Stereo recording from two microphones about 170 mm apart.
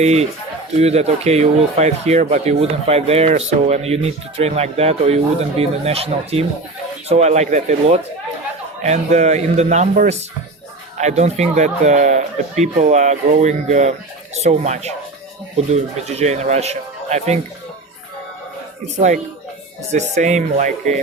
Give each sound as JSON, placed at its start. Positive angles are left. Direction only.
{"t": 0.0, "sound": "speech", "side_deg": -40}
{"t": 18.9, "sound": "speech", "side_deg": -45}